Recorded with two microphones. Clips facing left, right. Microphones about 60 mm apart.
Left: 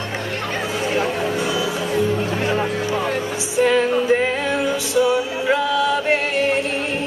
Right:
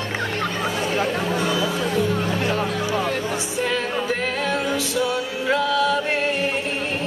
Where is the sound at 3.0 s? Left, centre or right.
Centre.